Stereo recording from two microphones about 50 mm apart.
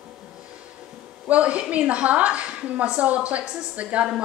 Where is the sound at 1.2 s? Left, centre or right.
Right.